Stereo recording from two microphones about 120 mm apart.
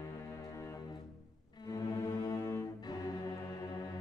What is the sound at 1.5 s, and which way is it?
Cello, 30° left (ahead or behind).